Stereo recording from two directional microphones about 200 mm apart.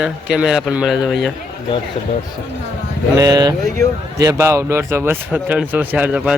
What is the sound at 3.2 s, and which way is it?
A man's voice, 20° right (ahead or behind).